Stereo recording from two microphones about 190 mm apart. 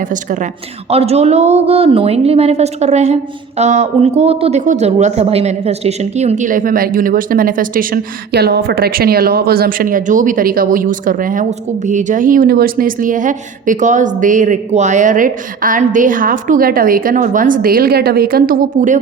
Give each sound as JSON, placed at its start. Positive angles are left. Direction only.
{"t": 0.9, "sound": "speech", "side_deg": -35}
{"t": 8.3, "sound": "a woman's voice", "side_deg": -55}